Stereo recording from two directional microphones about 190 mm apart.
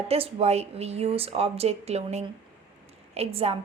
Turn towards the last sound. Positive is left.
turn(degrees=-30)  # may be behind; listen again after turning